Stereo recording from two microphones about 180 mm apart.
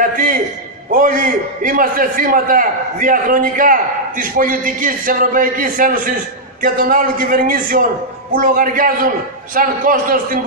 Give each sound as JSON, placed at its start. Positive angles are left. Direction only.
{"t": 0.0, "sound": "a man's voice", "side_deg": -50}